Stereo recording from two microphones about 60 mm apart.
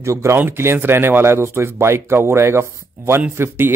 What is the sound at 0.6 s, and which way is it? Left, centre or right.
Speech, right.